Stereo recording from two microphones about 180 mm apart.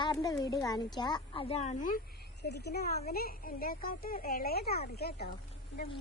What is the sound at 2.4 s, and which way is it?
Speech, 65° left (ahead or behind).